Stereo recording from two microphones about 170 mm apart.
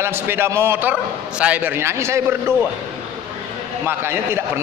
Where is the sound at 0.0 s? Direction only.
15° right (ahead or behind).